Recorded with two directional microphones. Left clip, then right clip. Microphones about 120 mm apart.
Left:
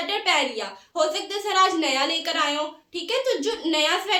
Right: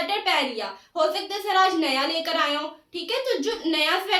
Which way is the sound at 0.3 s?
40° left (ahead or behind).